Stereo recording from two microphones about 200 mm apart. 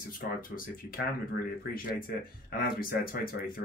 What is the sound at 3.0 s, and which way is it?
Speech, 45° left (ahead or behind).